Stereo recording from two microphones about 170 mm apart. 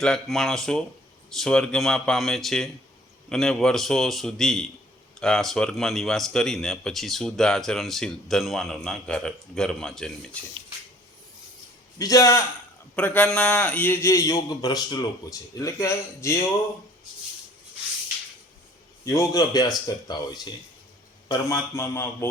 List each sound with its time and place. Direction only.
0.0 s speech: centre (ahead or behind)
11.9 s a man's voice: 20° left (ahead or behind)
19.0 s a man's voice: 20° left (ahead or behind)